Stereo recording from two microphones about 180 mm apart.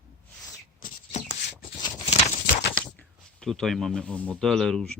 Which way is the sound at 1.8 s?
25° left (ahead or behind).